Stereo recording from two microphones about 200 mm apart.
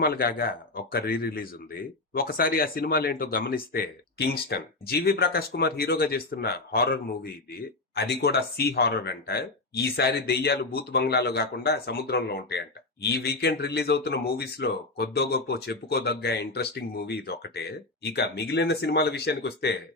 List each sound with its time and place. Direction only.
0.0 s speech: 50° left (ahead or behind)